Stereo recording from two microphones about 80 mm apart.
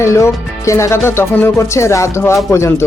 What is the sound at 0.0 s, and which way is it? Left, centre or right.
Speech, left.